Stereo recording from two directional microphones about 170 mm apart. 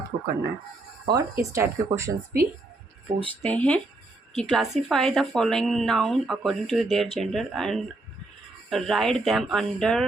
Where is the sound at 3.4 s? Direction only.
10° left (ahead or behind).